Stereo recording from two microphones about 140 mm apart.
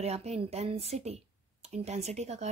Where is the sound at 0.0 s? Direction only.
50° right (ahead or behind).